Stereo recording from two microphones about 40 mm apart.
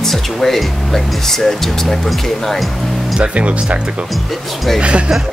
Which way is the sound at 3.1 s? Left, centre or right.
Right.